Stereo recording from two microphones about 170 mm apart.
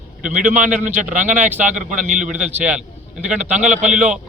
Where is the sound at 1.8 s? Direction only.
45° right (ahead or behind).